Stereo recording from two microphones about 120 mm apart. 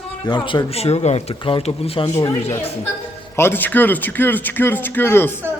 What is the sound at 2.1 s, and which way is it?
Speech, 25° left (ahead or behind).